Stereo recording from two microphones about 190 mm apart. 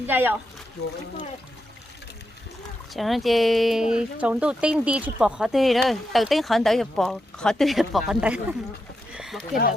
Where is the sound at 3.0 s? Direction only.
Centre (ahead or behind).